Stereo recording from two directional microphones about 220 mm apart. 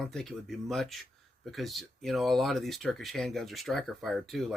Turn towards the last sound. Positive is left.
turn(degrees=0)  # may be behind; listen again after turning